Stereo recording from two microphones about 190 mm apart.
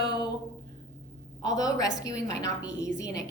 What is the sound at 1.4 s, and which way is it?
A woman's voice, 20° left (ahead or behind).